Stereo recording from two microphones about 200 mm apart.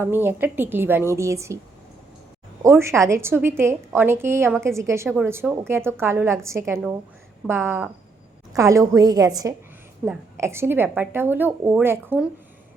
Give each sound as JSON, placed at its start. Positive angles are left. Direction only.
{"t": 0.0, "sound": "a woman's voice", "side_deg": -10}
{"t": 2.6, "sound": "a woman's voice", "side_deg": -15}